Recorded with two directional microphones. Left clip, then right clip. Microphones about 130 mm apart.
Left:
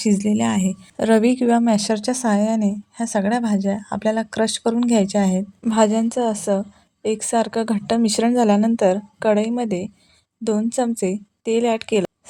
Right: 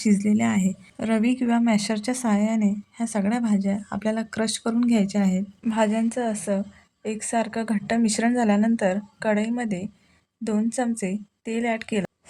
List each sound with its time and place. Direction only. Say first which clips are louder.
0.0 s a woman's voice: left 3 dB; 20° left (ahead or behind)
0.9 s a woman's voice: left 8 dB; 40° left (ahead or behind)